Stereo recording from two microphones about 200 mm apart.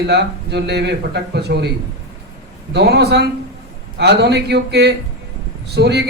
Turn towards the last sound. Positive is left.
turn(degrees=-55)  # may be behind; listen again after turning